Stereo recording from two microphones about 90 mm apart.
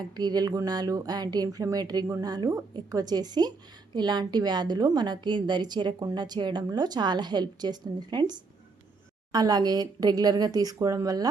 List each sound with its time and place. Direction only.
0.2 s a woman's voice: 50° right (ahead or behind)